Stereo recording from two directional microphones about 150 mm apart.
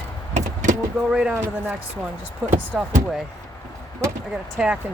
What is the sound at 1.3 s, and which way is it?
Speech, 15° right (ahead or behind).